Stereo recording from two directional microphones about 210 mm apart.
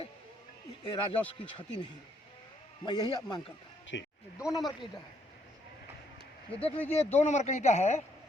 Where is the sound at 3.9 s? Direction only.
55° left (ahead or behind).